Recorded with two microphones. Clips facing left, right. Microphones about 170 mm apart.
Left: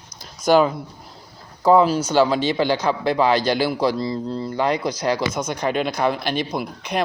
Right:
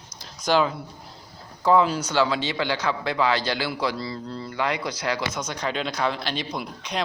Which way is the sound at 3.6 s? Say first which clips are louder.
Left 7 dB; 40° left (ahead or behind).